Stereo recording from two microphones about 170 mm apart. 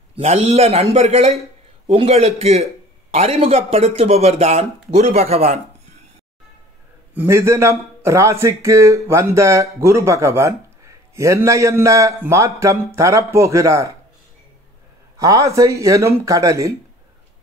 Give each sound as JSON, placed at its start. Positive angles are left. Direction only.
{"t": 0.1, "sound": "speech", "side_deg": -40}
{"t": 7.2, "sound": "a man's voice", "side_deg": -15}
{"t": 15.1, "sound": "speech", "side_deg": -20}